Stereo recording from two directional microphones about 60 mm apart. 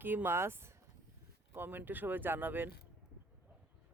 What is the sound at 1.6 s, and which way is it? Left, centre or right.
Speech, right.